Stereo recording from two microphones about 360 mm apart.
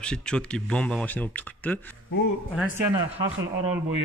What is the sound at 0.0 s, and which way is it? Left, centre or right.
A man's voice, centre.